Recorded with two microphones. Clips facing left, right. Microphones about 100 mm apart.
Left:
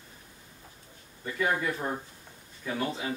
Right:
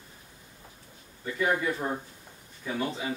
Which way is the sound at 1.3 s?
5° right (ahead or behind).